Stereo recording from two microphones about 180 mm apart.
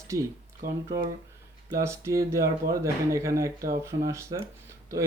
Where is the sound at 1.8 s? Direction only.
15° right (ahead or behind).